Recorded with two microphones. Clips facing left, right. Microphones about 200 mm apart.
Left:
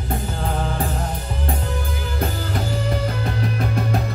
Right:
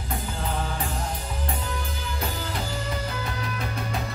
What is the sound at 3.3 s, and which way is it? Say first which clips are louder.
Music: left 8 dB; 50° left (ahead or behind).